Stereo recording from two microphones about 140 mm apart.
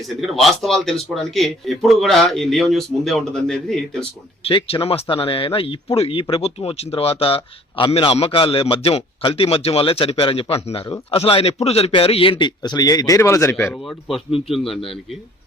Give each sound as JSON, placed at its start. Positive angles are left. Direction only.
{"t": 0.4, "sound": "a man's voice", "side_deg": 0}
{"t": 4.4, "sound": "a man's voice", "side_deg": 40}
{"t": 13.7, "sound": "a man's voice", "side_deg": 0}